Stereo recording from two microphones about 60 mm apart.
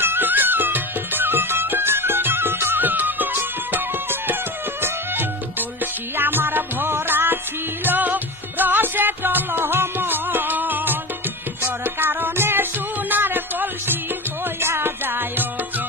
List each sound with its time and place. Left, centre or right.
0.0 s music: right